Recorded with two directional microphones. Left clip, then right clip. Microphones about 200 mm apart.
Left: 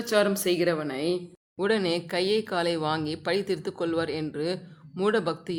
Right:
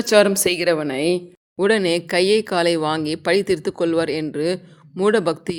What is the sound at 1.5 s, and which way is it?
Speech, 25° right (ahead or behind).